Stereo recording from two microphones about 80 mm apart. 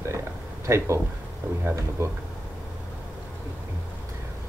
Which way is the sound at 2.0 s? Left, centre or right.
Right.